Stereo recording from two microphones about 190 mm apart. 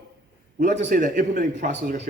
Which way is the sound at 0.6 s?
40° right (ahead or behind).